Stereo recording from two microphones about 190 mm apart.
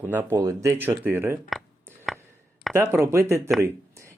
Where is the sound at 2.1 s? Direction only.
Centre (ahead or behind).